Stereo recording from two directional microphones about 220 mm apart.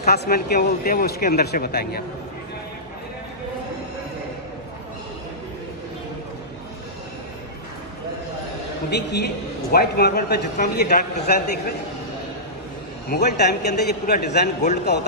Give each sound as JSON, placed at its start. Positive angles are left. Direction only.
{"t": 0.0, "sound": "a man's voice", "side_deg": 45}
{"t": 8.9, "sound": "a man's voice", "side_deg": 50}
{"t": 13.1, "sound": "a man's voice", "side_deg": 50}